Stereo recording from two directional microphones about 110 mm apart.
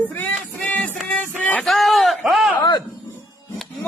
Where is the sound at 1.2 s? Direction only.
10° left (ahead or behind).